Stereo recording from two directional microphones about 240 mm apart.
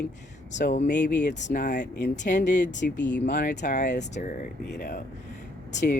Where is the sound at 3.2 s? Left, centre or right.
Left.